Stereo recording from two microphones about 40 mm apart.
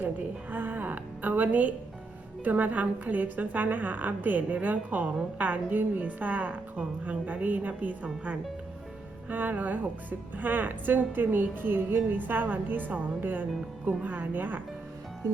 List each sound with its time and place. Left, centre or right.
0.5 s a woman's voice: right